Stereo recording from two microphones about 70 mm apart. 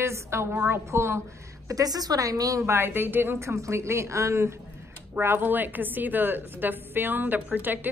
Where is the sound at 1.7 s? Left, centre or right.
Right.